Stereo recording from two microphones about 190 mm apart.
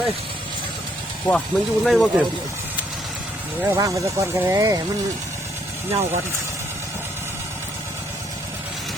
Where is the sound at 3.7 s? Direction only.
15° right (ahead or behind).